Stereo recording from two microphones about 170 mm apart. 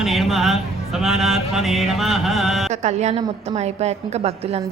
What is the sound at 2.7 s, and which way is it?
A woman's voice, 40° right (ahead or behind).